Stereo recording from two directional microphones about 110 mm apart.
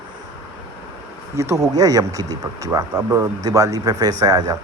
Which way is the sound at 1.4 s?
25° right (ahead or behind).